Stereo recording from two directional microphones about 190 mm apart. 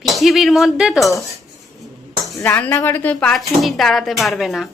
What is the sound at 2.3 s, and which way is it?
A woman's voice, 10° left (ahead or behind).